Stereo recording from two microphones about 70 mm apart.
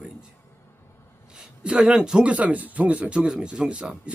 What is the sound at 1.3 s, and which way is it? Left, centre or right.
Speech, centre.